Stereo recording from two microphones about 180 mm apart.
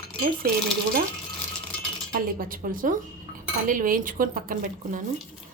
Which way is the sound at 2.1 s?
55° right (ahead or behind).